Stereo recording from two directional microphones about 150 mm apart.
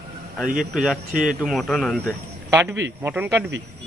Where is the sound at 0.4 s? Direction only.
65° right (ahead or behind).